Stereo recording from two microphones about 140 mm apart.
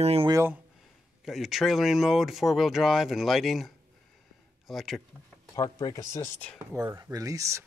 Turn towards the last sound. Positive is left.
turn(degrees=-20)  # may be behind; listen again after turning